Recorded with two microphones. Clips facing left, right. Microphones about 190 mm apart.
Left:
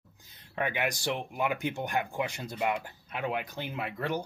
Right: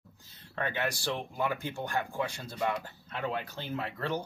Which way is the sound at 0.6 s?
15° left (ahead or behind).